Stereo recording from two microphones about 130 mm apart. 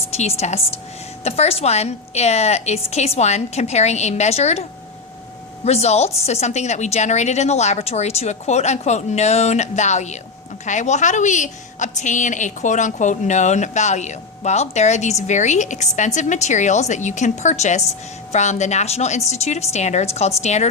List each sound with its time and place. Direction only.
0.1 s a woman's voice: 55° left (ahead or behind)
5.6 s a woman's voice: 55° left (ahead or behind)